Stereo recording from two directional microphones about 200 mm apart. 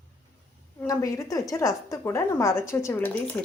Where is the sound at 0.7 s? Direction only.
15° left (ahead or behind).